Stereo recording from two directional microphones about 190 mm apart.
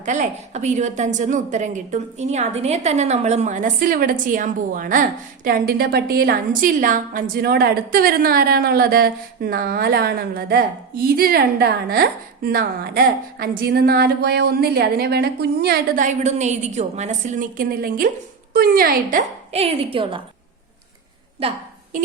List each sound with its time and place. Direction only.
0.0 s a woman's voice: 40° right (ahead or behind); by 16.0 s 55° right (ahead or behind)
16.0 s a woman's voice: 35° right (ahead or behind)
19.5 s a woman's voice: 30° right (ahead or behind)
21.4 s a woman's voice: 30° right (ahead or behind)